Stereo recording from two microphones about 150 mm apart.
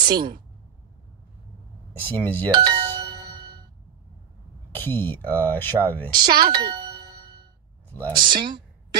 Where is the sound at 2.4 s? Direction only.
30° right (ahead or behind).